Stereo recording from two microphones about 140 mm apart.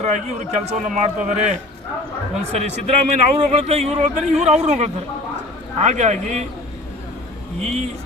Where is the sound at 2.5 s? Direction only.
50° right (ahead or behind).